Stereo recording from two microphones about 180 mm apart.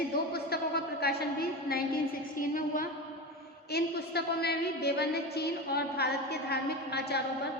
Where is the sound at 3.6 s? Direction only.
65° left (ahead or behind).